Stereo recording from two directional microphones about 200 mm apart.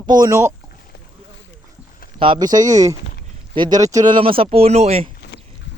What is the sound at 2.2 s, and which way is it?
Speech, 20° right (ahead or behind).